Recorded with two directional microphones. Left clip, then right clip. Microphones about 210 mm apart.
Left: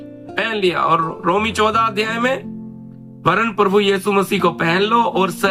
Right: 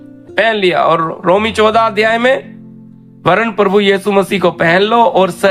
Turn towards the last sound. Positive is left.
turn(degrees=-35)  # may be behind; listen again after turning